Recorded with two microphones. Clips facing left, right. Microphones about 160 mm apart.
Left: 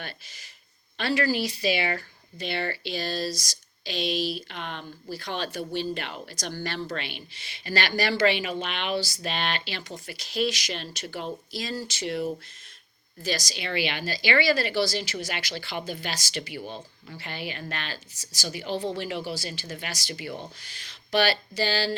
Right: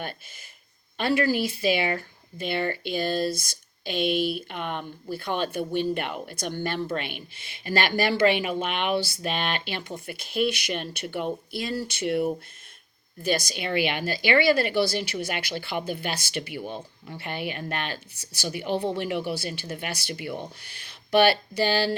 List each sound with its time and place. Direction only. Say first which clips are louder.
0.0 s speech: right 5 dB; 50° right (ahead or behind)